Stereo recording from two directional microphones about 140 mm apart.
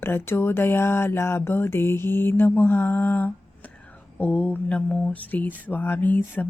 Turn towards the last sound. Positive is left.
turn(degrees=10)  # may be behind; listen again after turning